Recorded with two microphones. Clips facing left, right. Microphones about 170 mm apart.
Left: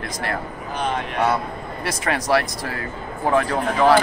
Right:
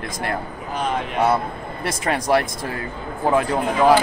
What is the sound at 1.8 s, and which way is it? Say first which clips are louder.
Speech: right 1 dB; 25° right (ahead or behind).